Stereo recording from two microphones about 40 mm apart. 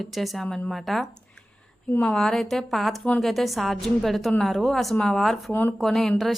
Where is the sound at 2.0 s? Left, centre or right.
Centre.